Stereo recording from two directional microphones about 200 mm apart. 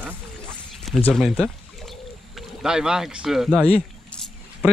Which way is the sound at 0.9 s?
Centre (ahead or behind).